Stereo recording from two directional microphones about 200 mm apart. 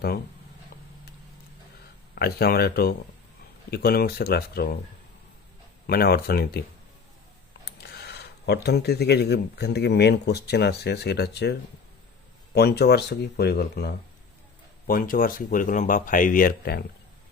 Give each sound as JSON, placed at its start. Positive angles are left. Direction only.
{"t": 2.1, "sound": "speech", "side_deg": 50}
{"t": 5.9, "sound": "speech", "side_deg": 50}
{"t": 7.6, "sound": "speech", "side_deg": 55}
{"t": 12.5, "sound": "speech", "side_deg": 55}